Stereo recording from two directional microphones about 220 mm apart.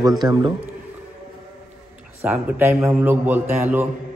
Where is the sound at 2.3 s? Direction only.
5° right (ahead or behind).